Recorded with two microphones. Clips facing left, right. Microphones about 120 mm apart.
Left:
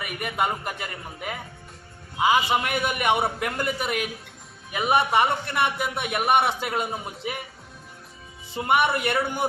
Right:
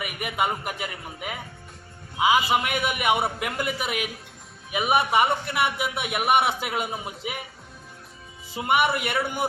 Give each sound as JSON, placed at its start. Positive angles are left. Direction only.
{"t": 0.0, "sound": "a man's voice", "side_deg": -10}
{"t": 8.5, "sound": "a man's voice", "side_deg": -5}